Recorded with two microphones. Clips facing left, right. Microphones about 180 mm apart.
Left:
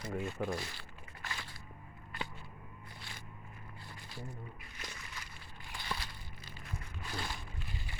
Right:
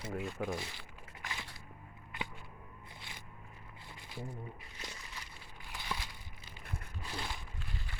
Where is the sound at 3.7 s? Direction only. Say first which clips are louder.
Right 3 dB; 20° right (ahead or behind).